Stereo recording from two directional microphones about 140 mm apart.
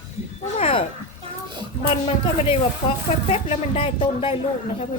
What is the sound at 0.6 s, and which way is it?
Speech, 40° left (ahead or behind).